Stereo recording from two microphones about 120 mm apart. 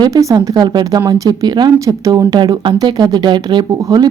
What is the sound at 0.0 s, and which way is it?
A woman's voice, 30° right (ahead or behind).